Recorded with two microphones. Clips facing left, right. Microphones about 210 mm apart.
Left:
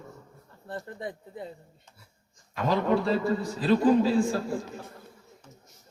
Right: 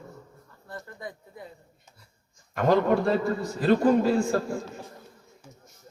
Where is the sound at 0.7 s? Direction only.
30° left (ahead or behind).